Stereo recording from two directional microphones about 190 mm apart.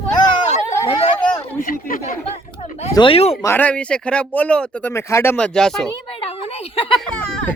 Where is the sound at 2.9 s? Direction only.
30° left (ahead or behind).